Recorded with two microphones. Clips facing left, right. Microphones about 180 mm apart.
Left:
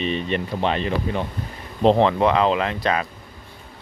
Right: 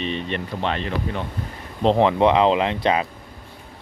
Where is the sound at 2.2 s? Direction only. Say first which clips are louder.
Right 2 dB; 20° right (ahead or behind).